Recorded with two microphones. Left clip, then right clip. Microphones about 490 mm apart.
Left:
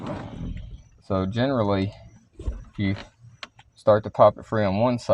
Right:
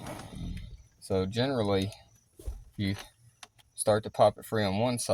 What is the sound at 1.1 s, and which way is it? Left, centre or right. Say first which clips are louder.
Speech: left 5 dB; right.